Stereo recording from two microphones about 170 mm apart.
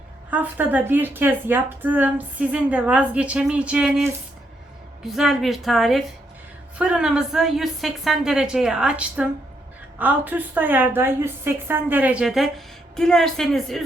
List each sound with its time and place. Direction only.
0.3 s a woman's voice: 10° right (ahead or behind)